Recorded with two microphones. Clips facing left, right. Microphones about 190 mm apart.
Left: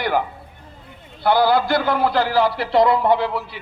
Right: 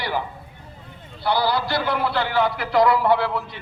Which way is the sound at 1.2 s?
50° left (ahead or behind).